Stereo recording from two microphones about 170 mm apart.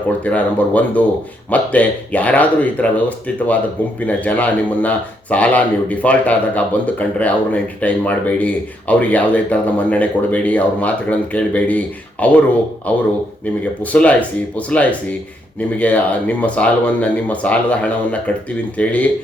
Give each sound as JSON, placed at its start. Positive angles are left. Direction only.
{"t": 0.3, "sound": "speech", "side_deg": 10}